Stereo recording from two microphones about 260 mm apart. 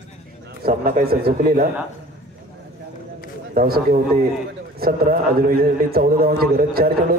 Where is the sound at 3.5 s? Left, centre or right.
Right.